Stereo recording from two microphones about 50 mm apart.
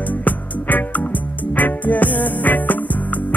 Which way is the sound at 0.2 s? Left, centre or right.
Left.